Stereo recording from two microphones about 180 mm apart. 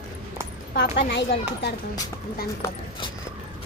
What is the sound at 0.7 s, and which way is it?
Speech, 60° left (ahead or behind).